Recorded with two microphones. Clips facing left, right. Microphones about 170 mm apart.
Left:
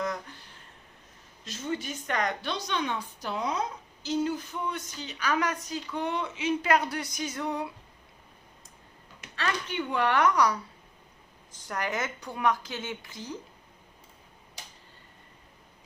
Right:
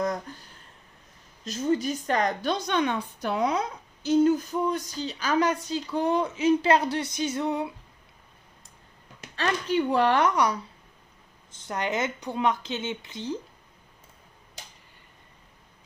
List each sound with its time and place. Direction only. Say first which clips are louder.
0.0 s a sound: right 4 dB; 40° right (ahead or behind)
1.5 s a woman's voice: right 8 dB; 40° right (ahead or behind)
2.5 s a woman's voice: right 6 dB; 55° right (ahead or behind)
4.0 s a woman's voice: right 8 dB; 50° right (ahead or behind)
6.7 s a woman's voice: right 4 dB; 25° right (ahead or behind)
9.3 s a woman's voice: right 6 dB; 35° right (ahead or behind)